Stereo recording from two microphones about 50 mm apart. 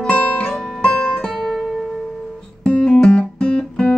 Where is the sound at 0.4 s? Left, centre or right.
Centre.